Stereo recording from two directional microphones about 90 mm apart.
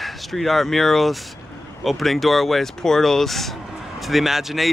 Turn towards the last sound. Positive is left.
turn(degrees=0)  # may be behind; listen again after turning